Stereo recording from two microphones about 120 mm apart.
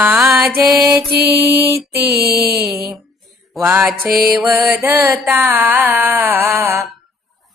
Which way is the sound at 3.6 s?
20° right (ahead or behind).